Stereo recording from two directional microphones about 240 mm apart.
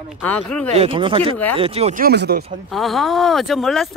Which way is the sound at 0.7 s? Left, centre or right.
Right.